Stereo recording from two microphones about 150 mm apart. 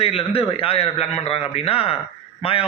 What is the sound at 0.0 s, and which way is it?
A man's voice, 40° left (ahead or behind).